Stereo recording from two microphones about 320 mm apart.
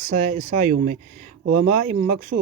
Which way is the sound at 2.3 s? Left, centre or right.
Right.